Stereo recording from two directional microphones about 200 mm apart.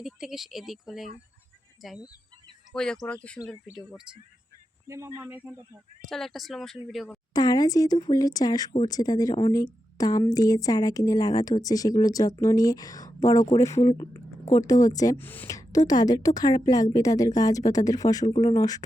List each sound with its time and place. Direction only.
0.0 s speech: centre (ahead or behind)
4.9 s speech: 15° right (ahead or behind)
6.1 s speech: centre (ahead or behind)
7.3 s a woman's voice: 20° left (ahead or behind)
14.1 s a sound: 15° left (ahead or behind)
14.7 s a woman's voice: 15° left (ahead or behind)